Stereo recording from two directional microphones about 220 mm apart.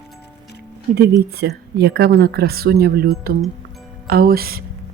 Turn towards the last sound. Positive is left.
turn(degrees=-45)  # may be behind; listen again after turning